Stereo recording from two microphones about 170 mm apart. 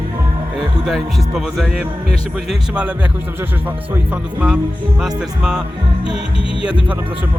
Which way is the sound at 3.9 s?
10° right (ahead or behind).